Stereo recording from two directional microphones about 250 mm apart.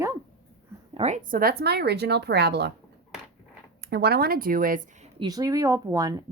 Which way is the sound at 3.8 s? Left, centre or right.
Right.